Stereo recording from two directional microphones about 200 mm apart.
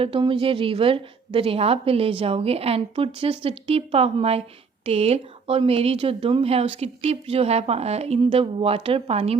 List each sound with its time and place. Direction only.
0.0 s speech: 25° right (ahead or behind)